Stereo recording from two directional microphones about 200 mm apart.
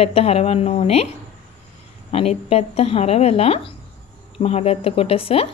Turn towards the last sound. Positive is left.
turn(degrees=30)  # may be behind; listen again after turning